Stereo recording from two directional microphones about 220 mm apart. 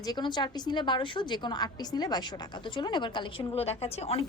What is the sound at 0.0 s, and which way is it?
A woman's voice, 20° left (ahead or behind).